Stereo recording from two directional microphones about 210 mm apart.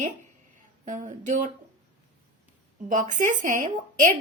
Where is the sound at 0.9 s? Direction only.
35° right (ahead or behind).